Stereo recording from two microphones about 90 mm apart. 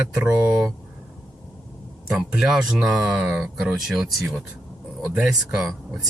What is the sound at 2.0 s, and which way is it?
Speech, 10° right (ahead or behind).